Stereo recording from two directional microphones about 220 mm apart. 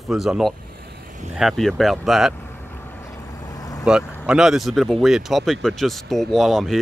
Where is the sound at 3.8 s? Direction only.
5° right (ahead or behind).